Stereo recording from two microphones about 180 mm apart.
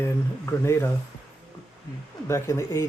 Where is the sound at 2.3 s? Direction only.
15° left (ahead or behind).